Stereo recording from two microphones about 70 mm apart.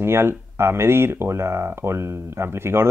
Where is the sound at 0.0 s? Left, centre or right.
Right.